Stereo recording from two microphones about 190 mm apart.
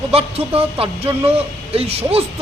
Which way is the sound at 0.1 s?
30° right (ahead or behind).